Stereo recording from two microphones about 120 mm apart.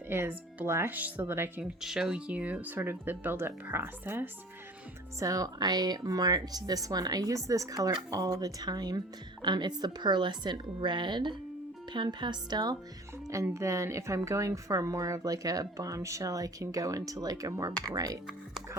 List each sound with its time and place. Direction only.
0.1 s a woman's voice: 20° right (ahead or behind)
1.8 s speech: 5° right (ahead or behind)
5.2 s speech: 30° right (ahead or behind)
13.2 s a woman's voice: 25° right (ahead or behind)